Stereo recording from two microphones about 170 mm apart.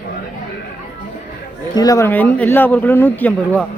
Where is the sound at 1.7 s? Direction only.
20° left (ahead or behind).